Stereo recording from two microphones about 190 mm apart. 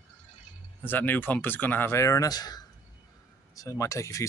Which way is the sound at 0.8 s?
10° left (ahead or behind).